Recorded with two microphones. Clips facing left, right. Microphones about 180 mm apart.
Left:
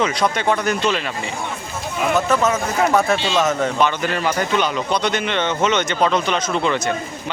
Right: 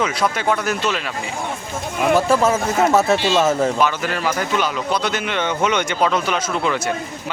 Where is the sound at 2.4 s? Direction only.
30° right (ahead or behind).